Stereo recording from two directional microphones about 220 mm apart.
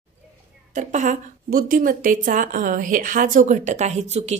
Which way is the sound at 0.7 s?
35° right (ahead or behind).